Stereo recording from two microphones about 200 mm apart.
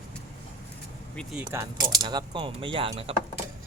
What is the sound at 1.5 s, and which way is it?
Speech, 15° right (ahead or behind).